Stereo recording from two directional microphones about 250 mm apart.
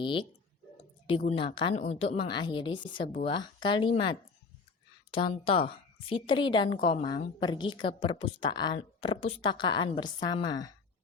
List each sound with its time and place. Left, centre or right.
0.0 s speech: centre